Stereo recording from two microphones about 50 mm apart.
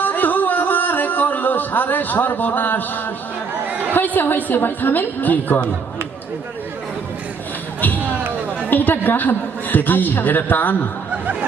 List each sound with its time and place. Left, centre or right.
0.0 s a sound: left
3.7 s chatter: right
3.9 s a man's voice: left
7.9 s a sound: right
8.7 s a man's voice: left
11.1 s music: right